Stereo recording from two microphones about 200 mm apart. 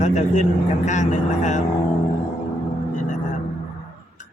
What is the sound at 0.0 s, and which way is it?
Speech, 35° left (ahead or behind).